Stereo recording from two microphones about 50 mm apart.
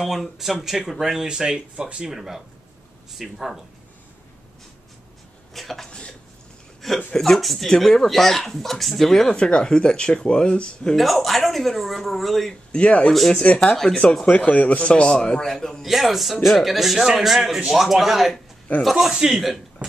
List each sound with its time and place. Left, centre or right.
0.0 s speech: centre
2.1 s speech: centre
5.5 s speech: centre
5.9 s speech: left
6.8 s speech: centre
9.4 s speech: centre
11.0 s speech: centre
12.7 s a man's voice: left
13.7 s speech: centre
14.4 s a man's voice: left; by 15.8 s centre
15.8 s speech: centre
19.1 s speech: centre
19.8 s a sound: centre